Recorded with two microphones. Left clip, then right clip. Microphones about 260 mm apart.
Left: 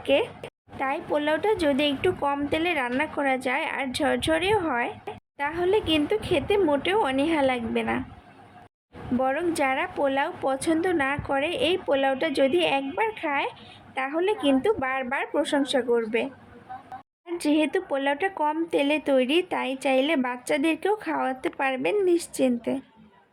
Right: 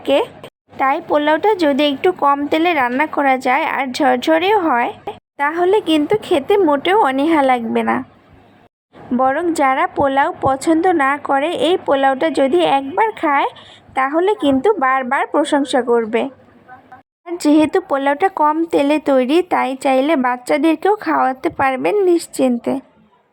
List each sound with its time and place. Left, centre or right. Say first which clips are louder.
0.0 s a woman's voice: right 7 dB; centre
9.1 s a woman's voice: right 9 dB; centre